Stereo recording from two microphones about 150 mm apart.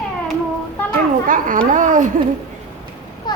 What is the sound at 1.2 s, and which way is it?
Speech, 60° right (ahead or behind).